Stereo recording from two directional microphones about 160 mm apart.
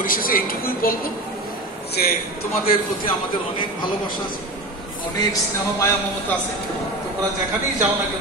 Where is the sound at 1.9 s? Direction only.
70° left (ahead or behind).